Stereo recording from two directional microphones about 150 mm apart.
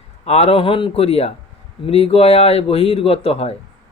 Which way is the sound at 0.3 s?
45° left (ahead or behind).